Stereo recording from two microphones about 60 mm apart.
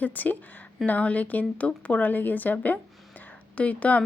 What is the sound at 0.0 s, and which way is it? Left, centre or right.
Speech, left.